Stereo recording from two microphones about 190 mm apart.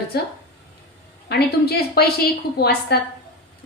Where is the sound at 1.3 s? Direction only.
55° left (ahead or behind).